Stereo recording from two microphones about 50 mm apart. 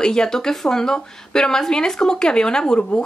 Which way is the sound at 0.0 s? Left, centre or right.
Centre.